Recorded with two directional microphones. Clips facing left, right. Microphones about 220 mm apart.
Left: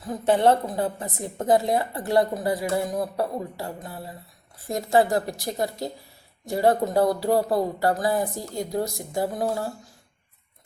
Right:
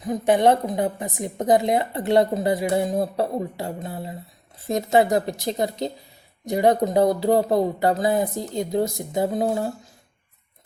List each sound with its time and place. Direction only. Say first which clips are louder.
0.0 s a woman's voice: right 2 dB; 15° right (ahead or behind)